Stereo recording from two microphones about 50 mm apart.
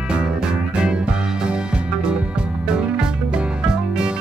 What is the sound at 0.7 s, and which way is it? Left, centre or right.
Music, centre.